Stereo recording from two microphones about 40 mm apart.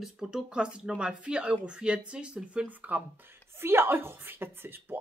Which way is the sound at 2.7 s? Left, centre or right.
Right.